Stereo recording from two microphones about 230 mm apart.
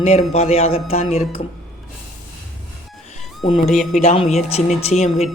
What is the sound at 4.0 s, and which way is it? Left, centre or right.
A woman's voice, left.